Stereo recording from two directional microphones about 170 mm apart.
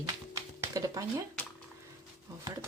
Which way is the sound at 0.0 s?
20° right (ahead or behind).